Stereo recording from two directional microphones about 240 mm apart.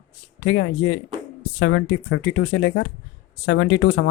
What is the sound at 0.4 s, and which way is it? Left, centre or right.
Speech, left.